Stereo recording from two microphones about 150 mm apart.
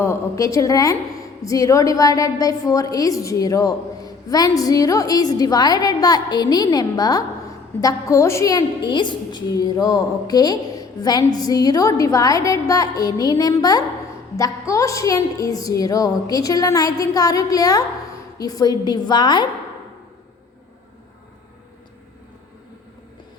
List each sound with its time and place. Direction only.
0.0 s a woman's voice: 20° left (ahead or behind)